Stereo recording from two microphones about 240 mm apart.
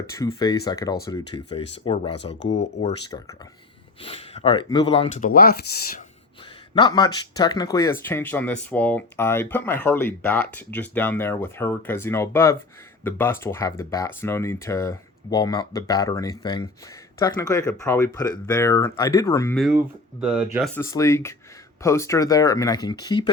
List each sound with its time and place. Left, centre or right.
0.3 s speech: centre
5.3 s speech: left
6.7 s speech: centre
19.5 s speech: centre
20.7 s speech: centre